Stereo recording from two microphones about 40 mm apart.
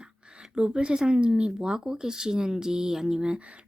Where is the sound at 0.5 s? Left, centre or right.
Right.